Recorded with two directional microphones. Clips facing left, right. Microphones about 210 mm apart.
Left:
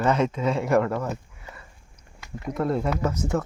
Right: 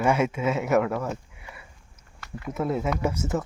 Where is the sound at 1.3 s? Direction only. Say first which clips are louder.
Left 1 dB; 10° right (ahead or behind).